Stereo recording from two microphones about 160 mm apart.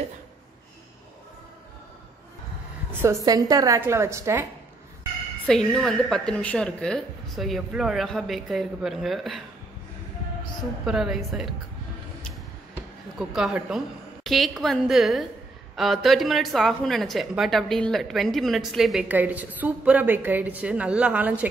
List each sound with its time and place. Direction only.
3.0 s a woman's voice: 20° right (ahead or behind)
5.5 s speech: 5° left (ahead or behind)
10.9 s speech: 5° right (ahead or behind)
13.2 s speech: 5° right (ahead or behind)